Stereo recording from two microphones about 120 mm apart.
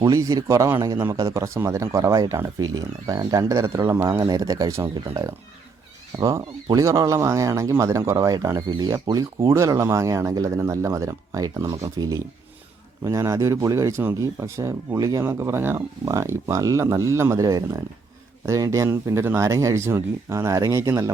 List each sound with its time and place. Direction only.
0.0 s speech: 30° right (ahead or behind)
0.9 s a man's voice: 20° right (ahead or behind)